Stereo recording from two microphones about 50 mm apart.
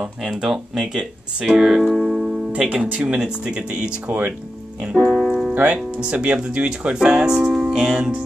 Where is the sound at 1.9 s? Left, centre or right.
Centre.